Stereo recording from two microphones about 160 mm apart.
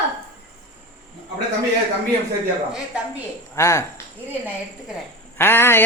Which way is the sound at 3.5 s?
20° left (ahead or behind).